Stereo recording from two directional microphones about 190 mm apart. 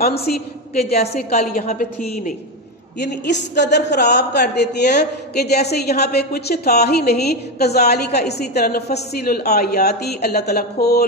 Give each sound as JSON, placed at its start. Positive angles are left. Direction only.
{"t": 0.7, "sound": "a woman's voice", "side_deg": 35}
{"t": 3.0, "sound": "speech", "side_deg": 65}